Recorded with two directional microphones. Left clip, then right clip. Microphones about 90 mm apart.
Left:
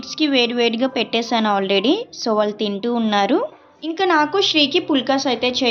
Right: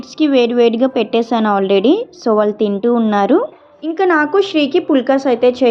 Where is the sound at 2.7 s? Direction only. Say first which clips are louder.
Right 3 dB; 20° right (ahead or behind).